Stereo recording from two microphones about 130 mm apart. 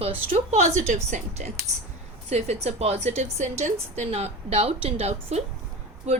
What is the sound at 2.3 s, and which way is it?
A woman's voice, 55° right (ahead or behind).